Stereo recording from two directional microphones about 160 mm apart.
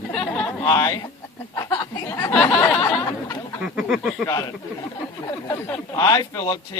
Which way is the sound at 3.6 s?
5° right (ahead or behind).